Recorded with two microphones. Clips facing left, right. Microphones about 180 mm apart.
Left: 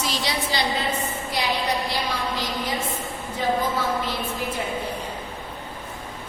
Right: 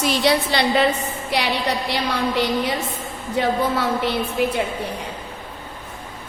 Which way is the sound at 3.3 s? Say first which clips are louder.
Right 4 dB; 70° right (ahead or behind).